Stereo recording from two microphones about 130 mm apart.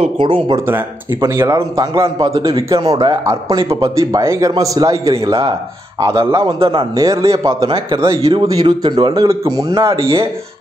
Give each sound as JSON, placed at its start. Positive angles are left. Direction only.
{"t": 0.0, "sound": "speech", "side_deg": -45}
{"t": 0.7, "sound": "speech", "side_deg": -20}
{"t": 5.4, "sound": "speech", "side_deg": -45}
{"t": 6.0, "sound": "speech", "side_deg": -30}
{"t": 7.6, "sound": "speech", "side_deg": -45}
{"t": 9.9, "sound": "speech", "side_deg": -45}